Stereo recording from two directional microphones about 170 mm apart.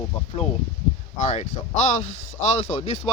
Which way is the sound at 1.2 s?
45° left (ahead or behind).